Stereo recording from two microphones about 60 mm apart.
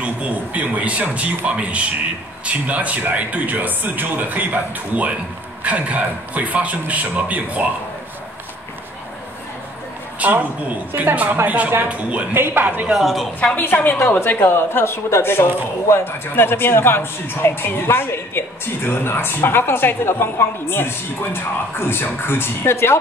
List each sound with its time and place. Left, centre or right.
0.0 s a man's voice: right
10.1 s a sound: right
10.9 s a woman's voice: right
11.4 s a man's voice: right
12.4 s a woman's voice: right
12.6 s a man's voice: centre
12.9 s a woman's voice: centre
13.7 s a woman's voice: left